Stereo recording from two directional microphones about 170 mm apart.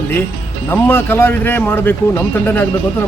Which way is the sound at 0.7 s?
10° left (ahead or behind).